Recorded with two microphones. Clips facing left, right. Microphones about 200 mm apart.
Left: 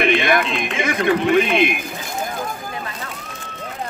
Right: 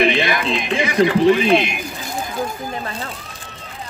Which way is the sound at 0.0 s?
50° left (ahead or behind).